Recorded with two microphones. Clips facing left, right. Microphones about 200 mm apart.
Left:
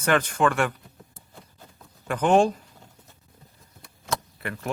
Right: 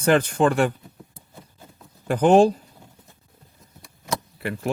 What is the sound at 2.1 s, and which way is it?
Speech, 35° right (ahead or behind).